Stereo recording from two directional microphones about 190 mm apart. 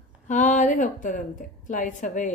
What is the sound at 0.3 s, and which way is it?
A woman's voice, 40° left (ahead or behind).